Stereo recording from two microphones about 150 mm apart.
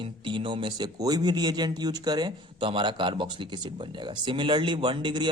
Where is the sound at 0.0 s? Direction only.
35° right (ahead or behind).